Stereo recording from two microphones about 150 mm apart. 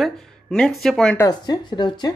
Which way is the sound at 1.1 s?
25° left (ahead or behind).